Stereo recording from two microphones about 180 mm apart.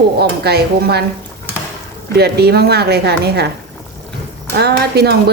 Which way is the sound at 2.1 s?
65° right (ahead or behind).